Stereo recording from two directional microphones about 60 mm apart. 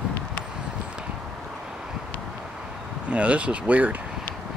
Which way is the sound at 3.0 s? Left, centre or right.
Right.